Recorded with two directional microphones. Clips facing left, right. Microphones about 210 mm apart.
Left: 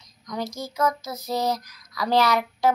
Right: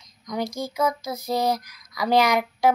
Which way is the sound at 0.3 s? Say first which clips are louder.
Right 3 dB; 10° right (ahead or behind).